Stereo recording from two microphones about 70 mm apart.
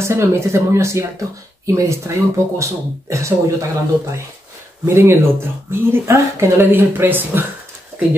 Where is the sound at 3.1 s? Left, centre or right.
Right.